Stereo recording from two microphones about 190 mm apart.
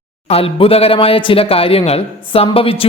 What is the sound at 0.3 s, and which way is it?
Speech, 30° left (ahead or behind).